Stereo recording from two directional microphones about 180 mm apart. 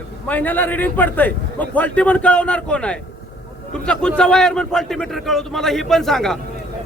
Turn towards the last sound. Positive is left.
turn(degrees=0)  # may be behind; listen again after turning